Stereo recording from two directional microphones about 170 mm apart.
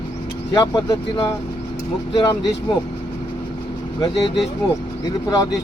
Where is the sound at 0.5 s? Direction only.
25° left (ahead or behind).